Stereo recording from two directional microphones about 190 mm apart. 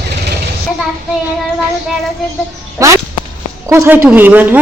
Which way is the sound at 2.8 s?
15° right (ahead or behind).